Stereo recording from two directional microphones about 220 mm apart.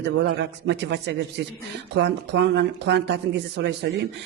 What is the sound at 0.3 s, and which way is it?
Speech, 50° right (ahead or behind).